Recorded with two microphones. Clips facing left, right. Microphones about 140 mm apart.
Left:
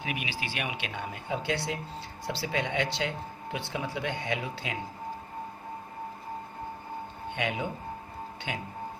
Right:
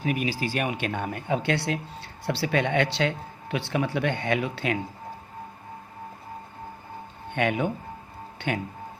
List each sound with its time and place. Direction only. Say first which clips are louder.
0.0 s speech: right 8 dB; 40° right (ahead or behind); by 4.8 s 65° right (ahead or behind)
7.3 s speech: right 7 dB; 60° right (ahead or behind)